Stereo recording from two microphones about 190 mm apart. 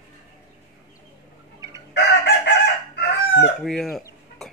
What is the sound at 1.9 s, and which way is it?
Chicken, 65° left (ahead or behind).